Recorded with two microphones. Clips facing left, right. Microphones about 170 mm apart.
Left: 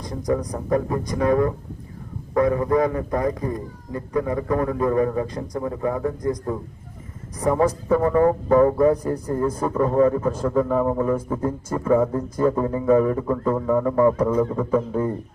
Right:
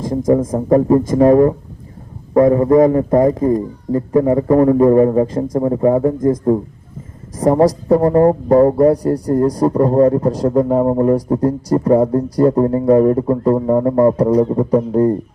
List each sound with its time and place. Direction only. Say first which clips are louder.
0.3 s a man's voice: right 9 dB; 45° right (ahead or behind)
6.1 s speech: right 9 dB; 25° right (ahead or behind)
7.3 s speech: right 7 dB; 40° right (ahead or behind)